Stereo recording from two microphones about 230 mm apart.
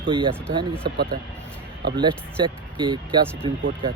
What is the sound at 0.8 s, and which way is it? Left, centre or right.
Speech, right.